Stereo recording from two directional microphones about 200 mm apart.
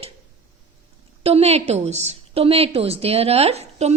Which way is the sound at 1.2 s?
30° right (ahead or behind).